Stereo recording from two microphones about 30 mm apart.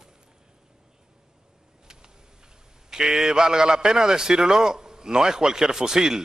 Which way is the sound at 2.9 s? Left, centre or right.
Right.